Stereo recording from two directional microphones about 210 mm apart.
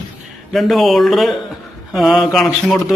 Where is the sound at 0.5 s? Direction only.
Centre (ahead or behind).